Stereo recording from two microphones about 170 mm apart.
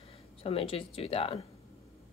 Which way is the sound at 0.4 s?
35° left (ahead or behind).